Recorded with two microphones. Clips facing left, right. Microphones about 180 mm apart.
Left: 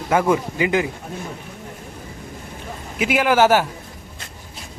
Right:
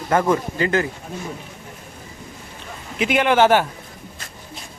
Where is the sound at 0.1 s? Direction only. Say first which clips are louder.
Even; 10° left (ahead or behind).